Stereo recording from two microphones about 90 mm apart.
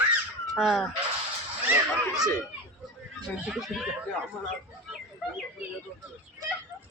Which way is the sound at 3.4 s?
5° right (ahead or behind).